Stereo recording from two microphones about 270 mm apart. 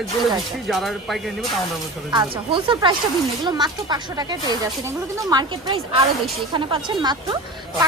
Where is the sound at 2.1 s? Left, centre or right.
Centre.